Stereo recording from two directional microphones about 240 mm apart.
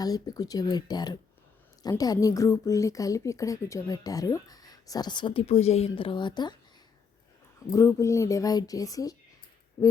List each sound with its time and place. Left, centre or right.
0.0 s speech: centre
7.7 s speech: centre